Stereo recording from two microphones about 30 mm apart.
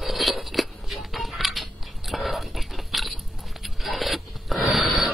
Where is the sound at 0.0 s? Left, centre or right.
Centre.